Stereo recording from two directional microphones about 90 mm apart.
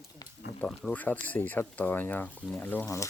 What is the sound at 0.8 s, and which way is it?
Speech, 15° left (ahead or behind).